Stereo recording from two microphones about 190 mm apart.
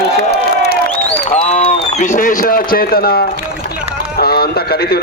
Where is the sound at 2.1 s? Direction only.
45° left (ahead or behind).